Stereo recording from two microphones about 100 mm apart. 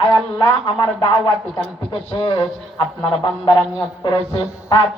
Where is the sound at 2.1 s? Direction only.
55° left (ahead or behind).